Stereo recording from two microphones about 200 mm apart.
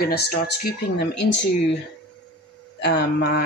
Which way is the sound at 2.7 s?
55° left (ahead or behind).